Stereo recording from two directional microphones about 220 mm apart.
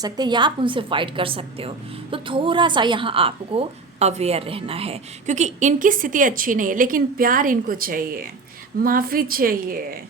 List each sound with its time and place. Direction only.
0.0 s a woman's voice: 20° right (ahead or behind); by 10.0 s 40° right (ahead or behind)